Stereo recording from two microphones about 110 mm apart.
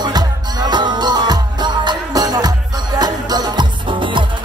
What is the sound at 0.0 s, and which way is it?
Music, 40° right (ahead or behind).